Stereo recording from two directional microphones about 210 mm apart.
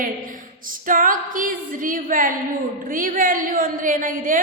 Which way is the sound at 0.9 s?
40° right (ahead or behind).